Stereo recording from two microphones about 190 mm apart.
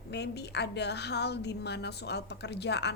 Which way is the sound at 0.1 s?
60° left (ahead or behind).